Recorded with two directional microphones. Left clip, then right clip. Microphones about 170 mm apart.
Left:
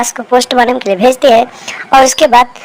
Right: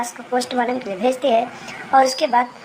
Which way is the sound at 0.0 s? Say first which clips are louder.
Left 12 dB; 35° left (ahead or behind).